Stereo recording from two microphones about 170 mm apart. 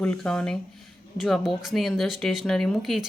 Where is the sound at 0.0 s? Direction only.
5° left (ahead or behind).